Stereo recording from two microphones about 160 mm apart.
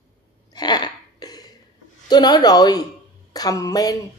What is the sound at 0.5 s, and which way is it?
Throat clearing, 25° left (ahead or behind).